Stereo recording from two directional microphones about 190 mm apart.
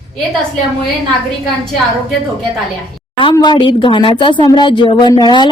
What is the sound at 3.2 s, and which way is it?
Speech, 25° left (ahead or behind).